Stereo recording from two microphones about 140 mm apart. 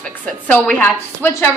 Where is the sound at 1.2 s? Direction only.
20° left (ahead or behind).